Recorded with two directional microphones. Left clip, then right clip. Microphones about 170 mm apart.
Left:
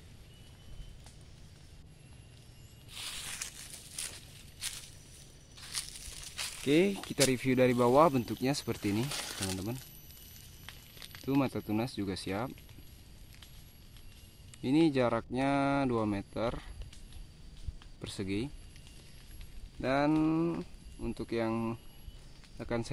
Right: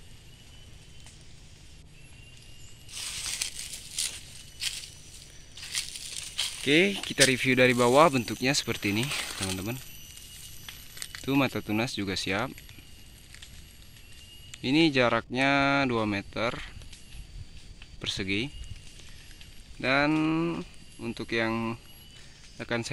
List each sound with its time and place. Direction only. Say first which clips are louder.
2.9 s snake: right 6 dB; 10° right (ahead or behind)
6.6 s speech: right 5 dB; 5° left (ahead or behind)
9.1 s speech: right 5 dB; 35° right (ahead or behind)
11.2 s speech: right 5 dB; 5° right (ahead or behind)
14.5 s speech: right 4 dB; 5° left (ahead or behind)
18.0 s speech: right 7 dB; 5° left (ahead or behind)
19.8 s speech: right 4 dB; centre (ahead or behind)